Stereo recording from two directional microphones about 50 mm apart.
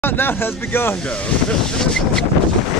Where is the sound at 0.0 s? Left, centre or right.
Left.